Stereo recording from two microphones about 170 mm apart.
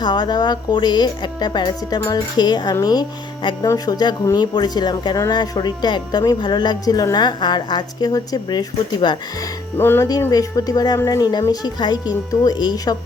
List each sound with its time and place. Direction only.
0.0 s speech: 25° left (ahead or behind)
9.7 s speech: 15° left (ahead or behind)